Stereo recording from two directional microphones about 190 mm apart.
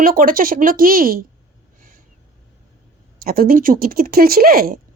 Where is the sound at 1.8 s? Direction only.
45° right (ahead or behind).